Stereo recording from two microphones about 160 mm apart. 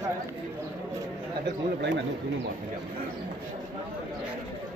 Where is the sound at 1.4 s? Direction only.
90° right.